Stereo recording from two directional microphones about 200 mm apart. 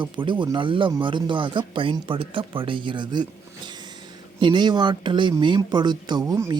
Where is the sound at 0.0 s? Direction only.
25° right (ahead or behind).